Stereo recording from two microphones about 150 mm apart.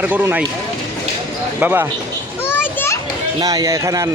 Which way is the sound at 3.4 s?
25° right (ahead or behind).